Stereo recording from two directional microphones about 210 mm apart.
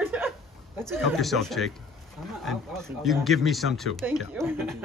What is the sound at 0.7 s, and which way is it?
Speech, 10° right (ahead or behind).